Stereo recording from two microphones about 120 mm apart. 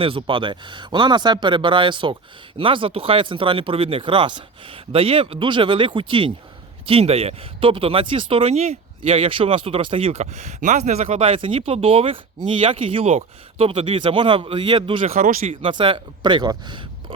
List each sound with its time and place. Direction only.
0.0 s speech: 50° right (ahead or behind)
10.1 s speech: 70° right (ahead or behind)
11.2 s speech: 50° right (ahead or behind)